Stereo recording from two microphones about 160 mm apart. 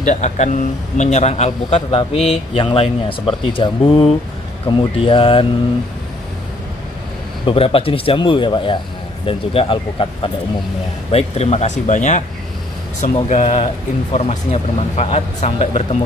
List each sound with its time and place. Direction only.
0.0 s a man's voice: 45° left (ahead or behind)
7.4 s a man's voice: 35° left (ahead or behind)
13.3 s a man's voice: 45° left (ahead or behind)